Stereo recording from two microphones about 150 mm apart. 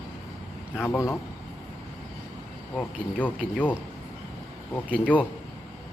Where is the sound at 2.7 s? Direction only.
10° left (ahead or behind).